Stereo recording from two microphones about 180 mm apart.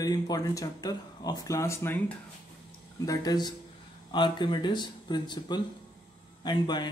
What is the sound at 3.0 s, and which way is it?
A man's voice, 20° left (ahead or behind).